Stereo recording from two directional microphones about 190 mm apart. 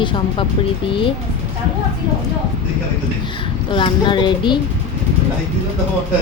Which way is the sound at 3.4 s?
25° left (ahead or behind).